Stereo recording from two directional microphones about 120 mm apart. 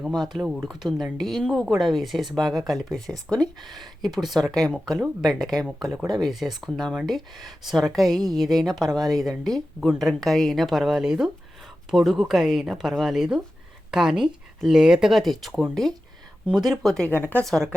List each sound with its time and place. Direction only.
0.2 s a woman's voice: centre (ahead or behind)
17.1 s speech: 20° left (ahead or behind)
17.4 s a woman's voice: 5° left (ahead or behind)